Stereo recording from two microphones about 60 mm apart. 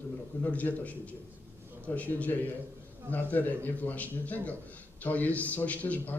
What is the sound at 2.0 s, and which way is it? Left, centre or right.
A man's voice, left.